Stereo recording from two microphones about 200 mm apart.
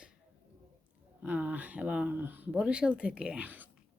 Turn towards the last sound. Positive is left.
turn(degrees=-10)  # may be behind; listen again after turning